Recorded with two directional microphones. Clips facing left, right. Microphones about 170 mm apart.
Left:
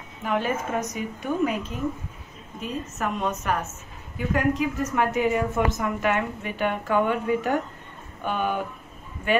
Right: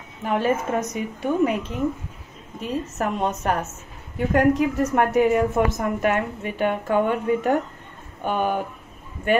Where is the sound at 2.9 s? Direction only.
35° right (ahead or behind).